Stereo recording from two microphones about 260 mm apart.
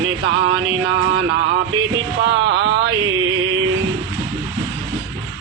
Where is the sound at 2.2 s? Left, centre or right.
Right.